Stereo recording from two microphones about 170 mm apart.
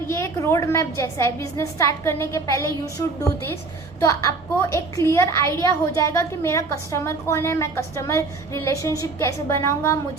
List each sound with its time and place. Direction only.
0.1 s a woman's voice: 15° left (ahead or behind)